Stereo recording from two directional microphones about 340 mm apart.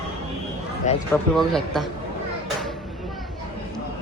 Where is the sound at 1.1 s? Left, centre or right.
Centre.